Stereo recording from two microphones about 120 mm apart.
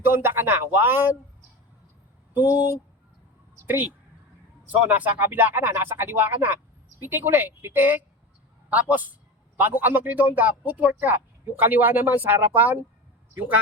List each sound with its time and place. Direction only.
0.0 s a man's voice: 20° right (ahead or behind)
2.3 s a man's voice: 15° right (ahead or behind)